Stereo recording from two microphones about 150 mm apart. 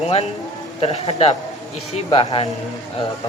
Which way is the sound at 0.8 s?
45° left (ahead or behind).